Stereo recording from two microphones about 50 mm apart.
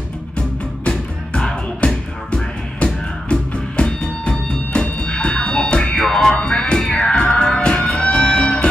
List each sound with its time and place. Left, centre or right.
0.8 s music: left